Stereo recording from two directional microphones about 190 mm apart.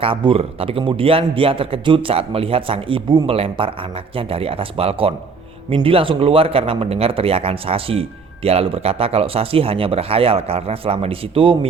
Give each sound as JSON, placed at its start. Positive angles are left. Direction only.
{"t": 0.0, "sound": "speech", "side_deg": -30}